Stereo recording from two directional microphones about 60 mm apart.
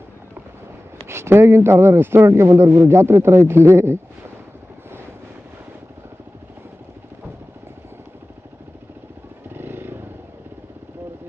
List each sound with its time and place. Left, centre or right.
1.0 s a man's voice: right
9.6 s vehicle: right